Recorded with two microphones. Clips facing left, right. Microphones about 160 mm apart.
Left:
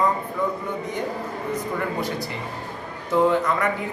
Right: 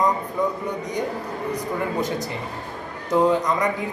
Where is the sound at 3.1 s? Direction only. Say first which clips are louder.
Right 1 dB; 15° right (ahead or behind).